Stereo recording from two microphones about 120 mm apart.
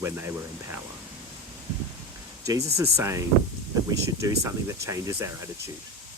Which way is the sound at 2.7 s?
25° right (ahead or behind).